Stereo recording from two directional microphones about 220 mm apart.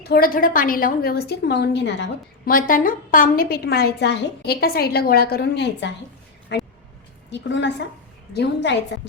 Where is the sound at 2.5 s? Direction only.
40° left (ahead or behind).